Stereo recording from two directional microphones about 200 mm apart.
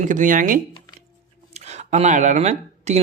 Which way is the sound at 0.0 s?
40° right (ahead or behind).